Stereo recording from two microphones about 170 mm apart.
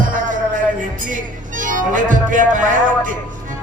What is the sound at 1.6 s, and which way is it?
Music, 50° right (ahead or behind).